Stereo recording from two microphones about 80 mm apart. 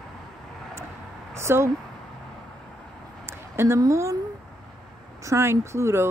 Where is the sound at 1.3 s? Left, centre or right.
Right.